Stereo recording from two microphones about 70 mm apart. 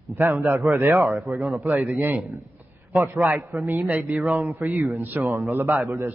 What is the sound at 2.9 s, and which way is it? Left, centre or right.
Speech, right.